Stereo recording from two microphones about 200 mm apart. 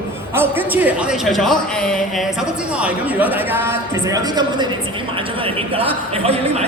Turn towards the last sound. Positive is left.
turn(degrees=-30)  # may be behind; listen again after turning